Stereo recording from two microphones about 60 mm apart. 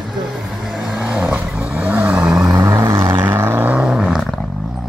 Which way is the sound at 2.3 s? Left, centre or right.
Right.